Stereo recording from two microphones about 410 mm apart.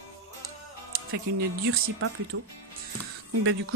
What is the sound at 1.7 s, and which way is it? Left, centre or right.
Speech, right.